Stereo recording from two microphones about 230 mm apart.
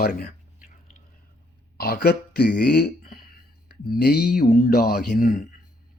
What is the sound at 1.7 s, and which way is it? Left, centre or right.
Speech, left.